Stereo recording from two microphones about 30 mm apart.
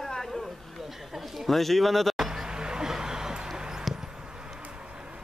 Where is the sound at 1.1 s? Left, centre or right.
Centre.